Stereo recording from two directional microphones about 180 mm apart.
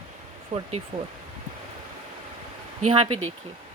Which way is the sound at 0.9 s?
45° right (ahead or behind).